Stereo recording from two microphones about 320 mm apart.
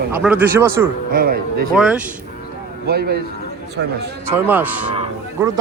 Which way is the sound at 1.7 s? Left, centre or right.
Centre.